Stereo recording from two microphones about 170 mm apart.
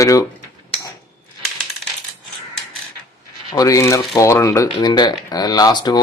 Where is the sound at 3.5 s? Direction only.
20° left (ahead or behind).